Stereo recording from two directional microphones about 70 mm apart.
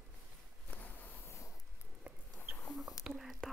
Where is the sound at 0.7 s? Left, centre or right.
Left.